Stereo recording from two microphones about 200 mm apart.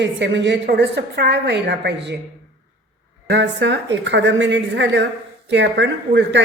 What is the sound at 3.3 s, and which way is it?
A woman's voice, 60° right (ahead or behind).